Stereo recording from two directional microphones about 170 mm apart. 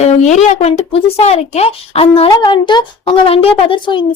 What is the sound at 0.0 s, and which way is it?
A woman's voice, 45° left (ahead or behind).